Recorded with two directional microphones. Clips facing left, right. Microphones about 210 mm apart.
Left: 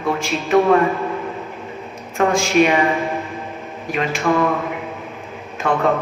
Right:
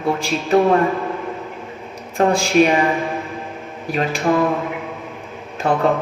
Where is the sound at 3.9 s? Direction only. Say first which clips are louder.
Right 1 dB; 35° right (ahead or behind).